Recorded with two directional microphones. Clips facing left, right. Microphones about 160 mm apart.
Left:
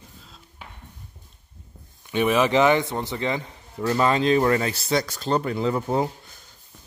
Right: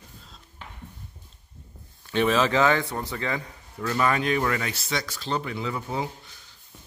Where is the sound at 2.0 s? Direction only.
15° left (ahead or behind); by 6.5 s 45° left (ahead or behind).